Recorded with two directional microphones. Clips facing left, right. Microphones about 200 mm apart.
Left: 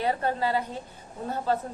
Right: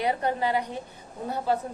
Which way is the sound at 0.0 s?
15° right (ahead or behind).